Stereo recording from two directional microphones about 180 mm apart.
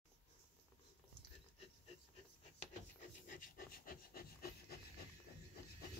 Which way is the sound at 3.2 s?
50° left (ahead or behind).